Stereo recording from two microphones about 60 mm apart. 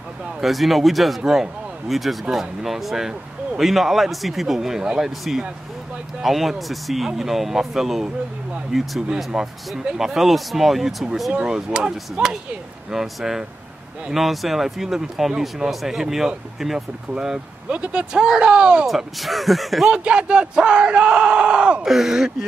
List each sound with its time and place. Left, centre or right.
0.4 s speech: centre
11.3 s speech: centre
18.9 s speech: centre
19.9 s speech: centre
21.8 s speech: centre